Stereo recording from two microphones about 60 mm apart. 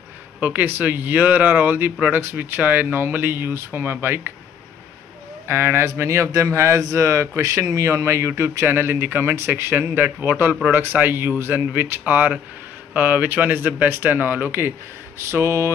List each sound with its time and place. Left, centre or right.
0.4 s speech: right
5.5 s speech: right
5.9 s speech: right
15.1 s speech: right